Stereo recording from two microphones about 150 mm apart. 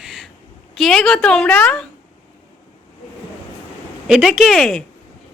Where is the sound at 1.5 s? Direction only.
15° left (ahead or behind).